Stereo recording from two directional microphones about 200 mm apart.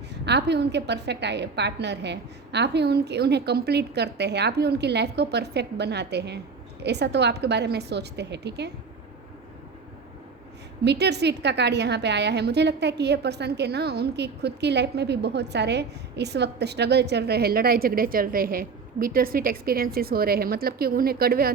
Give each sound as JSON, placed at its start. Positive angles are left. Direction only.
{"t": 0.1, "sound": "a woman's voice", "side_deg": -60}
{"t": 10.8, "sound": "a woman's voice", "side_deg": -55}